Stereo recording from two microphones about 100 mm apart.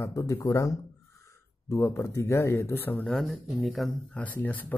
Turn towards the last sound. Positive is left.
turn(degrees=15)  # may be behind; listen again after turning